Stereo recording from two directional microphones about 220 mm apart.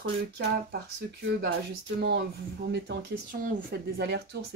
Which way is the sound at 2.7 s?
50° right (ahead or behind).